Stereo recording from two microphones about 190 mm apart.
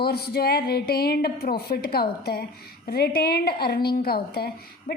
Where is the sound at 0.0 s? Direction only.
55° left (ahead or behind).